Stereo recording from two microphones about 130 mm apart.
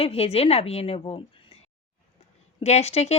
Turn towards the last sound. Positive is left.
turn(degrees=55)  # may be behind; listen again after turning